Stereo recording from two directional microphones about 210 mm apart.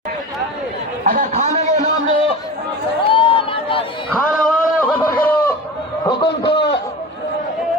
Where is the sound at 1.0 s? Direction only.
40° right (ahead or behind).